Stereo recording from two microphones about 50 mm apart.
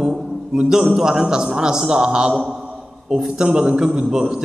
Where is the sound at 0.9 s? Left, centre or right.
Centre.